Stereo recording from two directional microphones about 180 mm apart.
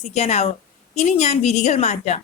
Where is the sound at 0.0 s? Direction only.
40° left (ahead or behind).